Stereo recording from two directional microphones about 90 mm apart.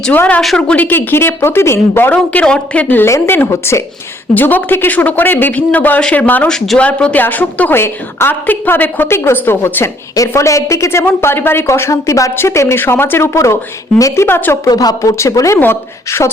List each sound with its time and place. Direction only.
0.1 s speech: 15° left (ahead or behind)
0.4 s a woman's voice: 5° left (ahead or behind)
0.8 s a woman's voice: 25° left (ahead or behind)
2.1 s a woman's voice: 10° left (ahead or behind); by 14.7 s 30° left (ahead or behind)
14.7 s speech: 45° left (ahead or behind)
15.2 s a woman's voice: 35° left (ahead or behind)